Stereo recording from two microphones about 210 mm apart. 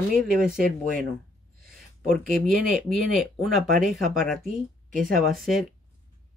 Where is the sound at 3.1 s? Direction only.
Centre (ahead or behind).